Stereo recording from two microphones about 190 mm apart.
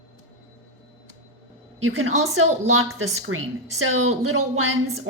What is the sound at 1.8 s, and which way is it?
A woman's voice, 90° right.